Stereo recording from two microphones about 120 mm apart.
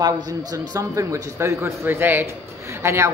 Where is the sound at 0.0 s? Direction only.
30° right (ahead or behind).